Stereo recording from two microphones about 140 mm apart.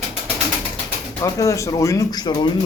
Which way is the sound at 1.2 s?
20° left (ahead or behind).